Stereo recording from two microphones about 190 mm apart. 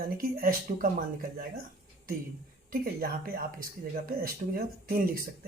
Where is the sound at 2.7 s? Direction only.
50° right (ahead or behind).